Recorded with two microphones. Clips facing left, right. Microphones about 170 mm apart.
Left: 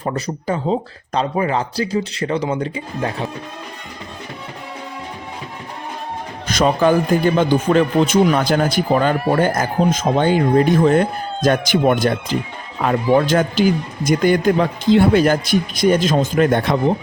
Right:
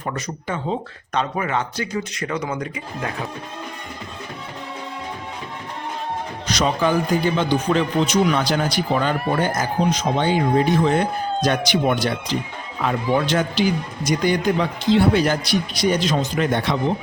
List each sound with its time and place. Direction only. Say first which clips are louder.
0.0 s speech: left 5 dB; 35° left (ahead or behind)
6.5 s speech: left 5 dB; 50° left (ahead or behind)